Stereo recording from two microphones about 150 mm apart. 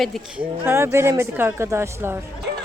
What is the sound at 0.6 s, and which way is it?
Speech, 15° right (ahead or behind).